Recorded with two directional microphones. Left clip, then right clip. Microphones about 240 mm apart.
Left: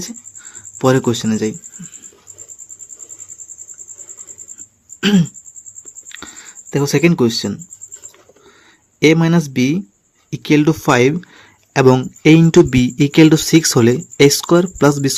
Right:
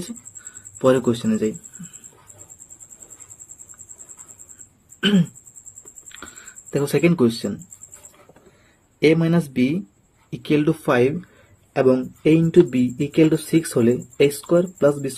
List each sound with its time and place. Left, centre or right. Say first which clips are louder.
0.8 s speech: left 3 dB; left
5.0 s speech: left 4 dB; left
6.1 s a sound: left 5 dB; left
9.0 s speech: left 5 dB; left